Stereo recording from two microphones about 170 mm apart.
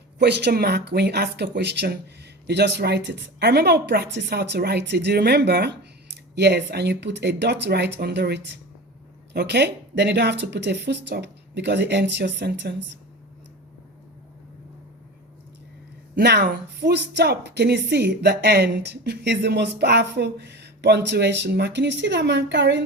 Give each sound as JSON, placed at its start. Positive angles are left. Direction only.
{"t": 0.2, "sound": "a woman's voice", "side_deg": -85}
{"t": 6.3, "sound": "a woman's voice", "side_deg": -85}
{"t": 16.1, "sound": "a woman's voice", "side_deg": -75}